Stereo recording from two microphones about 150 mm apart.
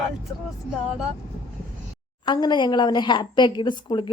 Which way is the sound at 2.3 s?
30° left (ahead or behind).